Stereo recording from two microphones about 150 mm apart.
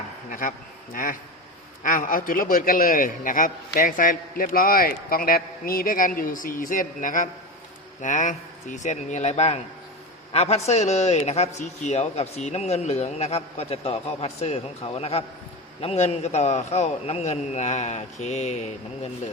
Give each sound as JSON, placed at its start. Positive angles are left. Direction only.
{"t": 0.3, "sound": "a man's voice", "side_deg": 65}